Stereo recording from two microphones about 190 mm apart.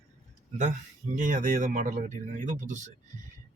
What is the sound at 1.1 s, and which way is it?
Speech, 45° right (ahead or behind).